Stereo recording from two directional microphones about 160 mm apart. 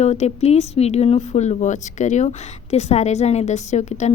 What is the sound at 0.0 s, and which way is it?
A woman's voice, 45° left (ahead or behind).